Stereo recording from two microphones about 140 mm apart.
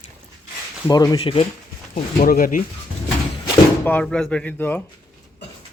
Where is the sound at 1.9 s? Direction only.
85° left.